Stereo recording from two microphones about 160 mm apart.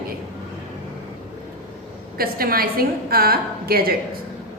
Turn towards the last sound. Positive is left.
turn(degrees=-70)  # may be behind; listen again after turning